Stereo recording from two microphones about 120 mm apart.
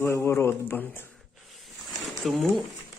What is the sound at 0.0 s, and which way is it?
Speech, 20° left (ahead or behind).